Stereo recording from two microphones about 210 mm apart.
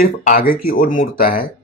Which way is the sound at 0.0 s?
40° left (ahead or behind).